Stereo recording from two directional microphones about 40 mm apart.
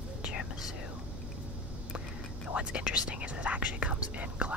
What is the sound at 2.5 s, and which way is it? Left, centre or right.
Speech, right.